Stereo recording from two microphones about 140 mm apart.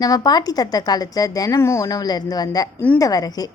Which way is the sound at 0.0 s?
25° left (ahead or behind).